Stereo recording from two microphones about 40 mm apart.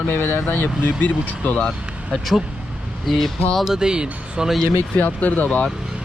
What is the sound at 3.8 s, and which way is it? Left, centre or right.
Speech, right.